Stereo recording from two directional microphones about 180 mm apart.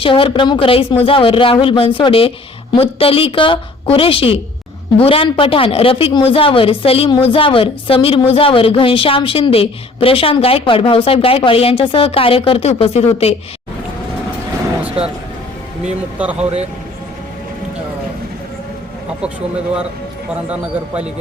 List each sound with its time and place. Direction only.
0.0 s a woman's voice: 30° left (ahead or behind)
16.4 s speech: 35° right (ahead or behind)
20.5 s a man's voice: 10° right (ahead or behind)